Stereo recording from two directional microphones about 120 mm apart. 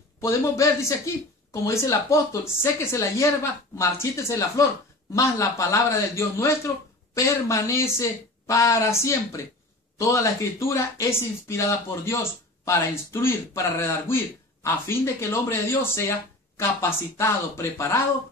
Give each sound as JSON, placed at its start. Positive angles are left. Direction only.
{"t": 0.2, "sound": "speech", "side_deg": 25}
{"t": 17.2, "sound": "speech", "side_deg": 20}